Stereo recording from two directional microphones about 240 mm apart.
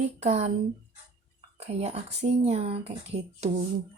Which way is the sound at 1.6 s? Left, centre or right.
Right.